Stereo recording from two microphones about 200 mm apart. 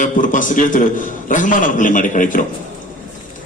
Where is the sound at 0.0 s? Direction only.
40° left (ahead or behind).